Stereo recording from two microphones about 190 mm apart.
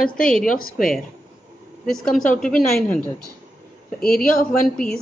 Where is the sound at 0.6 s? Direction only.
50° left (ahead or behind).